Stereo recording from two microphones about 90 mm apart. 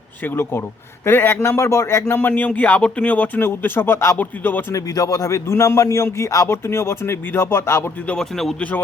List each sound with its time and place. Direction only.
0.2 s a man's voice: 25° left (ahead or behind)
4.7 s a man's voice: 35° left (ahead or behind)
8.0 s speech: 10° left (ahead or behind)